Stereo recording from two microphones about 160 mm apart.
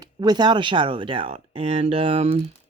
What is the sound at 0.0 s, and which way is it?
Speech, 25° right (ahead or behind).